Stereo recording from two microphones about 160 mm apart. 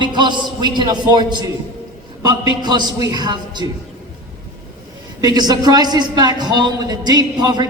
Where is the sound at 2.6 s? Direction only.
25° right (ahead or behind).